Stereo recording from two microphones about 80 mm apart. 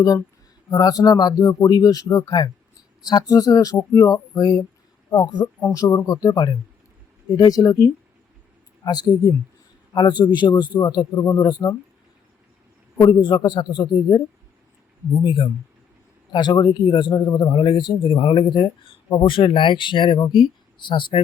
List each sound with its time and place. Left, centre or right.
0.7 s a man's voice: left
9.9 s speech: left
10.8 s a man's voice: left
13.0 s a man's voice: left
15.2 s speech: left